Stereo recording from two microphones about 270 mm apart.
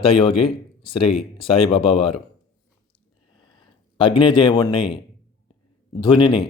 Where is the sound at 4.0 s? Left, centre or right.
Centre.